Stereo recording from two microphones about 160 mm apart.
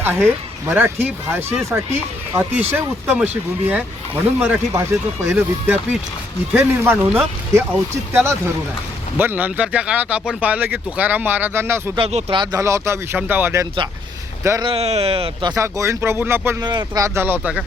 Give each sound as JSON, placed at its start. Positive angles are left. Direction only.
{"t": 0.0, "sound": "speech", "side_deg": -15}
{"t": 4.4, "sound": "speech", "side_deg": -15}
{"t": 11.9, "sound": "speech", "side_deg": -35}
{"t": 14.7, "sound": "speech", "side_deg": -40}
{"t": 15.5, "sound": "speech", "side_deg": -20}